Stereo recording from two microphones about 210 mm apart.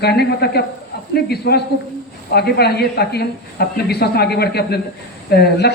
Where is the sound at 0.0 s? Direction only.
50° left (ahead or behind).